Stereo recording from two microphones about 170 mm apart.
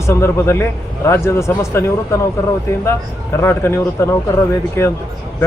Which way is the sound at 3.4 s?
15° left (ahead or behind).